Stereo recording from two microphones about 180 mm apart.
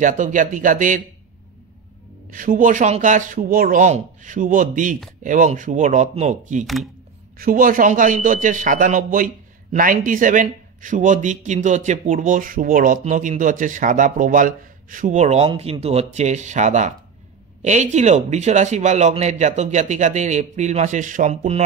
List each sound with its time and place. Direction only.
0.0 s a man's voice: 45° right (ahead or behind)
2.3 s a man's voice: 50° right (ahead or behind)
6.6 s speech: centre (ahead or behind)
7.3 s a man's voice: 50° right (ahead or behind)